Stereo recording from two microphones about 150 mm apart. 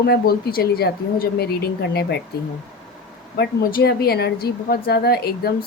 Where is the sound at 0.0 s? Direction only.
90° left.